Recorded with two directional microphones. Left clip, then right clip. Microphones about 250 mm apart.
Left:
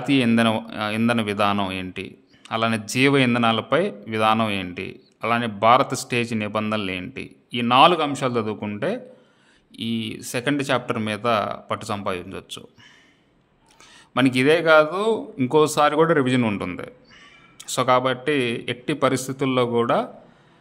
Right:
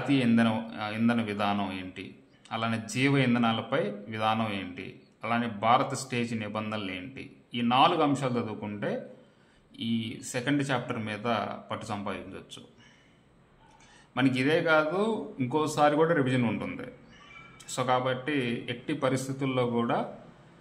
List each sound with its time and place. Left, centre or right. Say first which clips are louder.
0.1 s speech: left 7 dB; left
14.1 s speech: left 8 dB; left